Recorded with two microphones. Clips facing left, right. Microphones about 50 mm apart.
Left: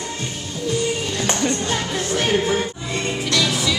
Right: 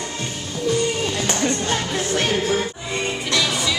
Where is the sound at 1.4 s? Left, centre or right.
Centre.